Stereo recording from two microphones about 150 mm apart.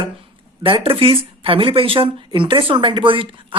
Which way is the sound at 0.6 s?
35° right (ahead or behind).